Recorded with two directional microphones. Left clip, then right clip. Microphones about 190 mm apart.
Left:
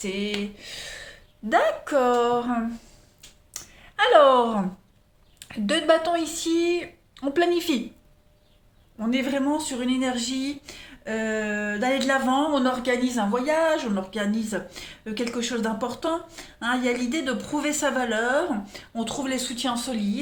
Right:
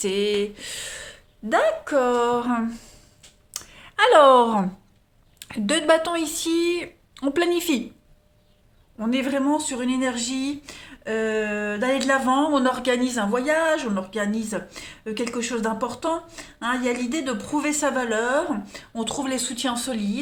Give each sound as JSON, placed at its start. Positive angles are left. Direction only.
{"t": 0.0, "sound": "speech", "side_deg": -45}
{"t": 1.5, "sound": "speech", "side_deg": -15}
{"t": 3.5, "sound": "clicking", "side_deg": -35}
{"t": 5.4, "sound": "speech", "side_deg": -25}
{"t": 9.0, "sound": "speech", "side_deg": -25}